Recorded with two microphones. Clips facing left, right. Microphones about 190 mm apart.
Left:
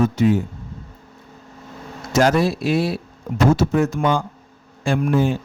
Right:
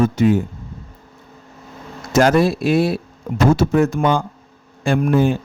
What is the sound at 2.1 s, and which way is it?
A man's voice, 55° right (ahead or behind).